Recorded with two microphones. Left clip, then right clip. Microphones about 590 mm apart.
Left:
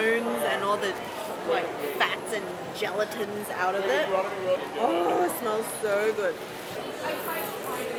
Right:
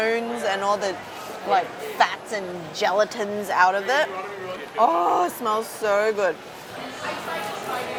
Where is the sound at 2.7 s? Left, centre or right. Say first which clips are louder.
Right 8 dB; right.